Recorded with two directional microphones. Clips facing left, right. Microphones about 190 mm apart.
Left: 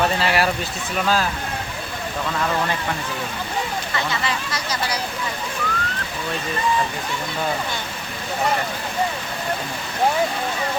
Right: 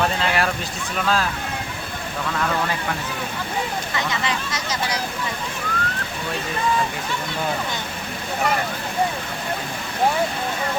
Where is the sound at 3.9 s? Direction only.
20° right (ahead or behind).